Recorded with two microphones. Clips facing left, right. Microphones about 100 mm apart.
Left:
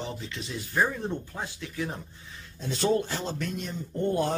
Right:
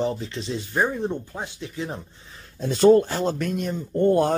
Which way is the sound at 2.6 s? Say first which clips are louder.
Right 10 dB; 50° right (ahead or behind).